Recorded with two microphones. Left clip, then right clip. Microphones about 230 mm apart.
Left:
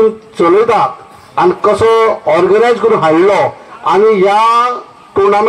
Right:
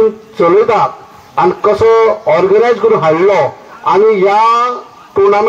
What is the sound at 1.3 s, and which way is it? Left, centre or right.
A man's voice, left.